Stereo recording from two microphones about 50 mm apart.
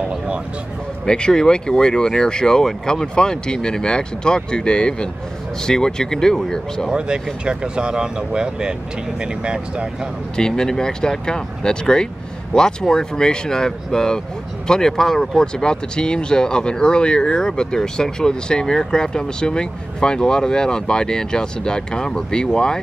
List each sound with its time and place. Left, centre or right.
1.0 s speech: centre
6.9 s speech: centre
10.3 s speech: centre